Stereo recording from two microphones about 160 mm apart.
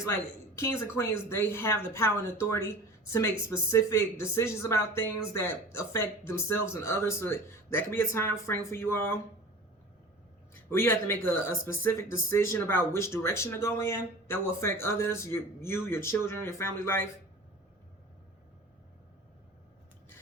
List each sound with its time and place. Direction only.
0.9 s speech: 15° left (ahead or behind)
10.5 s speech: 15° left (ahead or behind)